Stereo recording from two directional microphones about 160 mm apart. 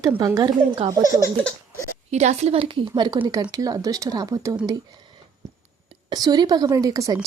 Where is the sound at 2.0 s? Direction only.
45° right (ahead or behind); by 4.5 s 25° right (ahead or behind).